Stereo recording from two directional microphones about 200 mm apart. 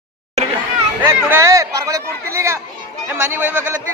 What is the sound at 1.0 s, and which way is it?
Speech, 10° right (ahead or behind).